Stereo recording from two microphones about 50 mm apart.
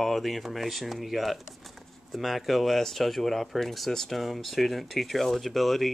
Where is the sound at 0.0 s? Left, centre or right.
Centre.